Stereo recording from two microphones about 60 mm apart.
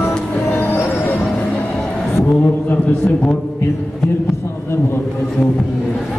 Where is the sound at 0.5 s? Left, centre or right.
Left.